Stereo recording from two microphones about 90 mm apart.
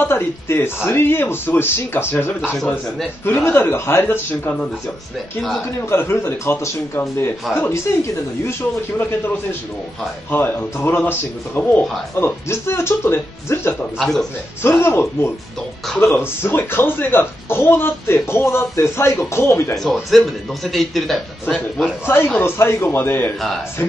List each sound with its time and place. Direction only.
0.0 s speech: 25° left (ahead or behind)
5.9 s speech: 30° left (ahead or behind)
10.3 s speech: 25° left (ahead or behind)
13.9 s a man's voice: 5° left (ahead or behind)
14.6 s speech: 25° left (ahead or behind)
19.8 s a man's voice: centre (ahead or behind)
22.0 s speech: 25° left (ahead or behind)